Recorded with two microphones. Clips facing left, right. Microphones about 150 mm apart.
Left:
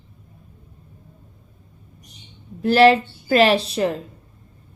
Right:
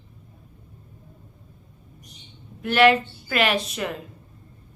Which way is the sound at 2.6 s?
35° left (ahead or behind).